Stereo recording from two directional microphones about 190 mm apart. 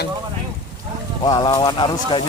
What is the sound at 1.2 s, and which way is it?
Speech, 20° left (ahead or behind).